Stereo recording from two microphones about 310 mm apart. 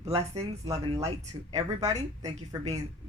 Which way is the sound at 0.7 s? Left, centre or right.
Centre.